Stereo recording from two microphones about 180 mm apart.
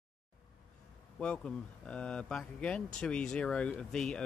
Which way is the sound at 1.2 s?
5° left (ahead or behind).